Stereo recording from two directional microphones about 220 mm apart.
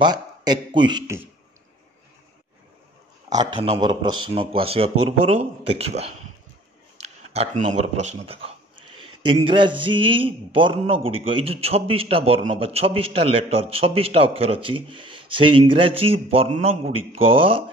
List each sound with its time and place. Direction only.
0.0 s a man's voice: 20° right (ahead or behind)
3.3 s a man's voice: 20° right (ahead or behind)